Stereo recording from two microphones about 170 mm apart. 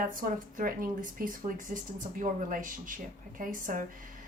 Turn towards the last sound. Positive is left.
turn(degrees=-50)  # may be behind; listen again after turning